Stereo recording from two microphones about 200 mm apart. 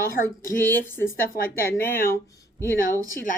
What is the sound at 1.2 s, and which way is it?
Speech, 45° left (ahead or behind).